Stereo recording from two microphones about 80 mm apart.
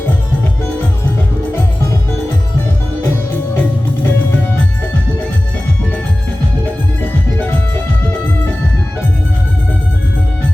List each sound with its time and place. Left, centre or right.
3.5 s music: left